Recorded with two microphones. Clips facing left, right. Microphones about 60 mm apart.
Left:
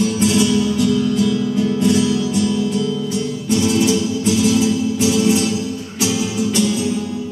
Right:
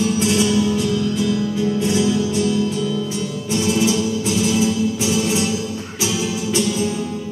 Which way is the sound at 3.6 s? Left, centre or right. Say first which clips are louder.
Left 1 dB; centre.